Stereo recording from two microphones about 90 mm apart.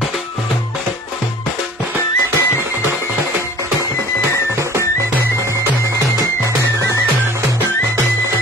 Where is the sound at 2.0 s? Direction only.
25° left (ahead or behind).